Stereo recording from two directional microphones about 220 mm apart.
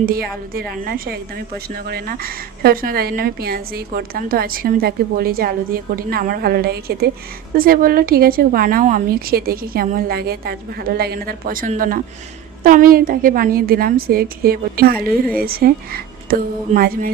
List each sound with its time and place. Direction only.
0.0 s a woman's voice: 40° right (ahead or behind)